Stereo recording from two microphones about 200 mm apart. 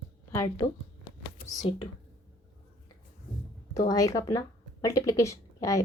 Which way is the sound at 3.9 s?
15° left (ahead or behind).